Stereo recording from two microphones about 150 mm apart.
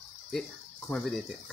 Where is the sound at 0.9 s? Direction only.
5° left (ahead or behind).